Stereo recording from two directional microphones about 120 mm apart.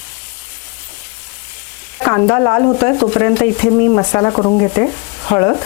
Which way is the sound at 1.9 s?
25° left (ahead or behind).